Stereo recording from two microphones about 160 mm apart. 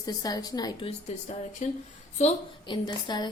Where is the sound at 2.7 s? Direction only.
30° left (ahead or behind).